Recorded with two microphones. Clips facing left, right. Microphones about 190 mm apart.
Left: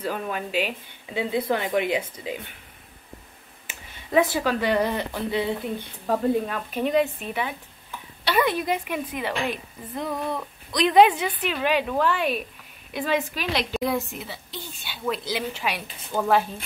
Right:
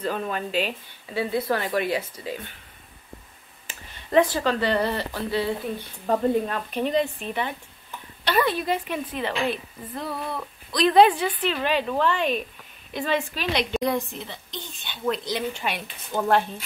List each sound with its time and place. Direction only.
0.0 s a woman's voice: 10° left (ahead or behind)
3.6 s speech: 10° left (ahead or behind)
6.0 s a woman's voice: centre (ahead or behind)